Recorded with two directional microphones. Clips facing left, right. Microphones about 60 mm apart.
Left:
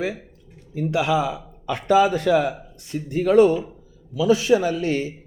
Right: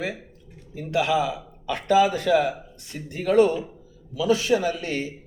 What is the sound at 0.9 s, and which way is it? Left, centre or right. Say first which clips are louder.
Speech: left 1 dB; centre.